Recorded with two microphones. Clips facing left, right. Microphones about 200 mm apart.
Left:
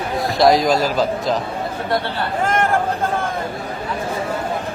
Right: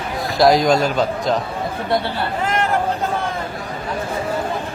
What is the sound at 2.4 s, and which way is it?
Chatter, 50° left (ahead or behind).